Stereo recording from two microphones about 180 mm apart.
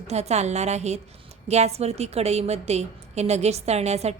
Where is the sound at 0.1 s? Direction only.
35° right (ahead or behind).